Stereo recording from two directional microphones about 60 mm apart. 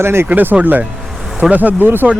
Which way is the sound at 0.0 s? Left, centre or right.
Right.